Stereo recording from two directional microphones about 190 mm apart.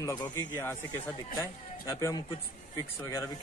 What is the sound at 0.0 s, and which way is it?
A man's voice, 20° left (ahead or behind).